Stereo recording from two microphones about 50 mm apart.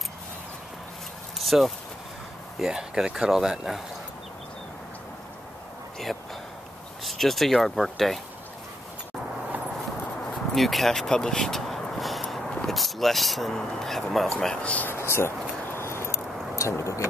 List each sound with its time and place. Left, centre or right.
1.4 s a sound: centre
2.6 s speech: centre
6.1 s speech: centre
7.1 s speech: centre
10.5 s a sound: centre
13.6 s speech: centre
14.6 s speech: left
14.9 s speech: left
15.6 s a sound: left
16.5 s speech: left